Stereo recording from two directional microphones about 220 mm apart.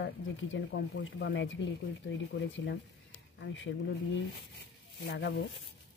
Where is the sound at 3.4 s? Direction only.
60° left (ahead or behind).